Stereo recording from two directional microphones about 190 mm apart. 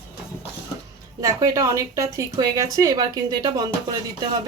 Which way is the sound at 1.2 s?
15° right (ahead or behind).